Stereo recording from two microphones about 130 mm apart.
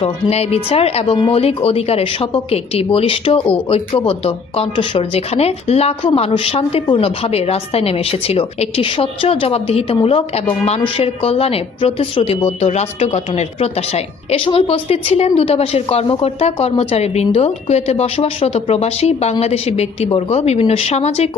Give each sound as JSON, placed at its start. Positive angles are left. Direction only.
{"t": 0.0, "sound": "a woman's voice", "side_deg": 55}